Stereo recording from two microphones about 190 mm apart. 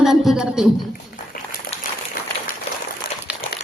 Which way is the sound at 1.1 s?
50° left (ahead or behind).